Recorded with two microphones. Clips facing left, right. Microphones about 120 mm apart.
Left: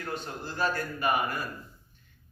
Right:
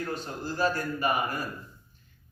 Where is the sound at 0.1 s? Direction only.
40° right (ahead or behind).